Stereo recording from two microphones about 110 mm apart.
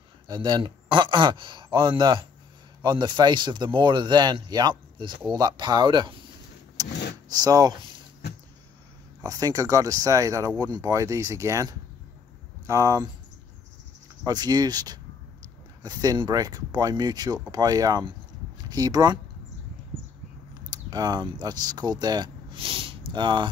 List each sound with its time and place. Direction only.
0.3 s speech: 40° right (ahead or behind)
6.8 s vehicle: 35° right (ahead or behind)
9.2 s speech: 35° right (ahead or behind)
14.2 s speech: 40° right (ahead or behind)
20.7 s speech: 40° right (ahead or behind)